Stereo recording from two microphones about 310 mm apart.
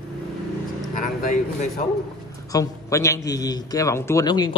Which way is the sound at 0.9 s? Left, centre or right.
Left.